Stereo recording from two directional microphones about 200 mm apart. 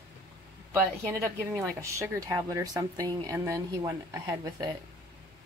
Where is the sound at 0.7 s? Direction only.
15° right (ahead or behind).